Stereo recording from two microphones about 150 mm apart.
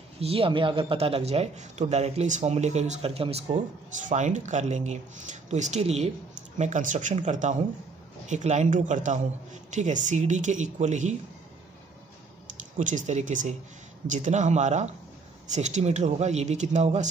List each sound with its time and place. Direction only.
0.2 s speech: 40° right (ahead or behind)
12.7 s speech: 55° right (ahead or behind)